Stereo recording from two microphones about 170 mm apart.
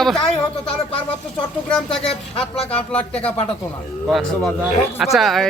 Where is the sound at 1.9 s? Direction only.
35° left (ahead or behind).